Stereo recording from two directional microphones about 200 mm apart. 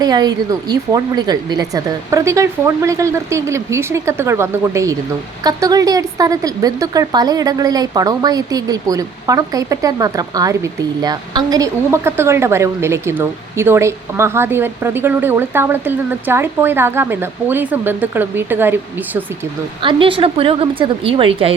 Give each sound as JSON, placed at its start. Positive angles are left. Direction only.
{"t": 0.0, "sound": "speech", "side_deg": -20}
{"t": 19.8, "sound": "a woman's voice", "side_deg": -25}